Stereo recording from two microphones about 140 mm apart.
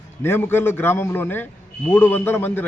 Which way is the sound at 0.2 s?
15° left (ahead or behind).